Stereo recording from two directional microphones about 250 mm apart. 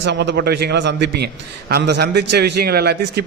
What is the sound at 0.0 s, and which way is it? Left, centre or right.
A man's voice, right.